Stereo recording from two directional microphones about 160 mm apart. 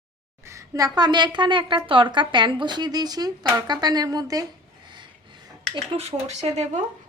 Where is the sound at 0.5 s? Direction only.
20° right (ahead or behind).